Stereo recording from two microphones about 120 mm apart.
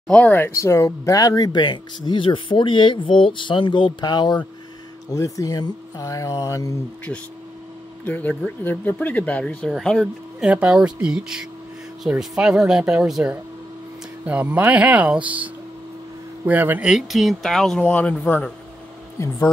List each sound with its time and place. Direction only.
0.1 s speech: 15° left (ahead or behind)
0.6 s speech: 25° left (ahead or behind)
8.0 s speech: 15° left (ahead or behind)
10.4 s speech: 10° right (ahead or behind)
16.9 s speech: centre (ahead or behind)
19.2 s speech: 25° left (ahead or behind)